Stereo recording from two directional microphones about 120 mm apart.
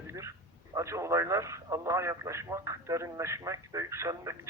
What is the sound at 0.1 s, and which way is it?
Speech, 25° right (ahead or behind).